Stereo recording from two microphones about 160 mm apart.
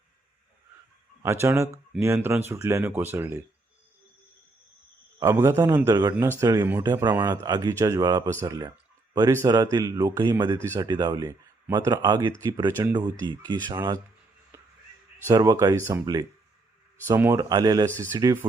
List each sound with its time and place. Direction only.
1.2 s speech: 15° right (ahead or behind)
5.2 s speech: 20° right (ahead or behind)
7.1 s speech: 15° right (ahead or behind)
7.4 s speech: 25° right (ahead or behind)
12.6 s speech: 15° right (ahead or behind)
12.9 s speech: 25° right (ahead or behind)
14.5 s crow: 15° right (ahead or behind)
15.3 s speech: 20° right (ahead or behind)